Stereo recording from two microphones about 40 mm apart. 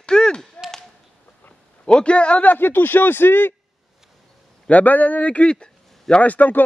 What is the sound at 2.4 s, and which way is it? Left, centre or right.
A man's voice, left.